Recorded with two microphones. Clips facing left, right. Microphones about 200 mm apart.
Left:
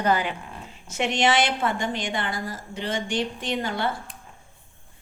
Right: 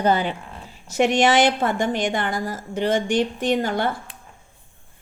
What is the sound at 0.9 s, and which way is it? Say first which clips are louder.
A woman's voice: right 5 dB; 40° right (ahead or behind).